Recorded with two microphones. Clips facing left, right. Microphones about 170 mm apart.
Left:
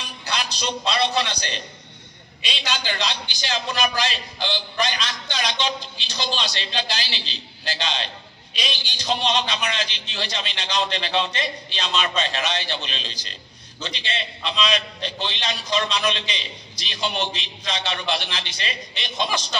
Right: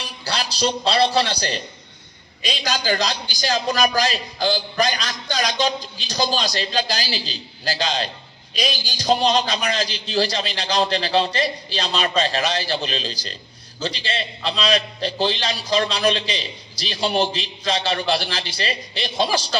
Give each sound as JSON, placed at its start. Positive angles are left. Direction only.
{"t": 0.0, "sound": "a man's voice", "side_deg": -35}